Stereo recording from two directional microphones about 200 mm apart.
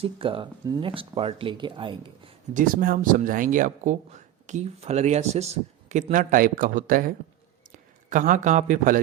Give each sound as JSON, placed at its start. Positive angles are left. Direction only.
{"t": 0.0, "sound": "speech", "side_deg": -25}
{"t": 2.5, "sound": "a man's voice", "side_deg": -40}